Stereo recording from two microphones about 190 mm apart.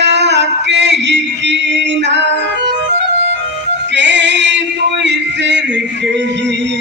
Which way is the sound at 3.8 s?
70° right (ahead or behind).